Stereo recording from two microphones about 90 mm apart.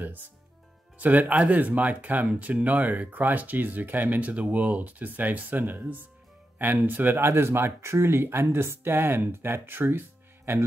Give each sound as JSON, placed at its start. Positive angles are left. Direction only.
{"t": 0.9, "sound": "speech", "side_deg": -20}